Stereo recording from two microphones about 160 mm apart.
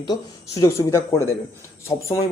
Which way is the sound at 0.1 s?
20° left (ahead or behind).